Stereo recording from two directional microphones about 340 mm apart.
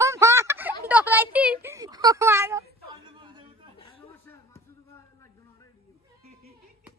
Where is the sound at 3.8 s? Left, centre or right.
Centre.